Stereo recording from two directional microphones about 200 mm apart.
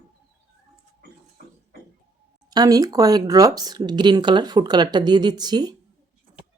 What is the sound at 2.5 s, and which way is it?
Speech, 20° right (ahead or behind).